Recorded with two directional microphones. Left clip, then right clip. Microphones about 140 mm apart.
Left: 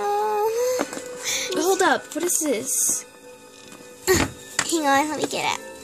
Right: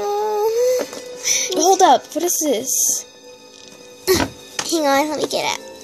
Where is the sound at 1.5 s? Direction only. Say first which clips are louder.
Right 8 dB; 25° left (ahead or behind).